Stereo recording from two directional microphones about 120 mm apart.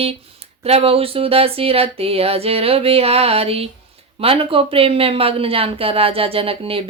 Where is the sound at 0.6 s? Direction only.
55° right (ahead or behind).